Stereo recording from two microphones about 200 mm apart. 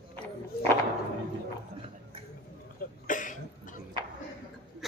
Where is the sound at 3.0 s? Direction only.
40° left (ahead or behind).